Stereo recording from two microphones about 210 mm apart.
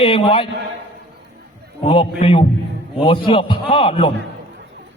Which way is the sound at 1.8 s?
30° left (ahead or behind).